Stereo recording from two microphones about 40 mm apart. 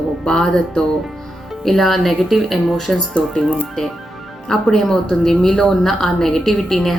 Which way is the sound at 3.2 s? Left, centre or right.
Left.